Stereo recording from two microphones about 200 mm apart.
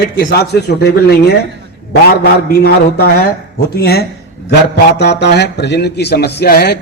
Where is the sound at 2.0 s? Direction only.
50° left (ahead or behind).